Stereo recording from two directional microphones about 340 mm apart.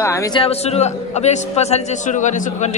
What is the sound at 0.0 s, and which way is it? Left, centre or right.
A man's voice, centre.